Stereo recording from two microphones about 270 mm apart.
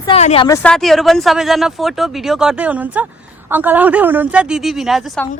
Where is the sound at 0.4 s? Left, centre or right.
Centre.